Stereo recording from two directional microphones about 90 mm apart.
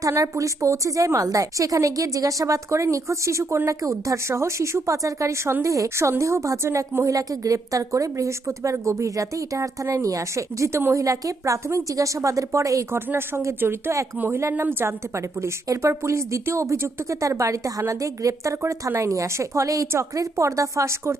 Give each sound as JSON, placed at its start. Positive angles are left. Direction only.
{"t": 0.0, "sound": "a woman's voice", "side_deg": -35}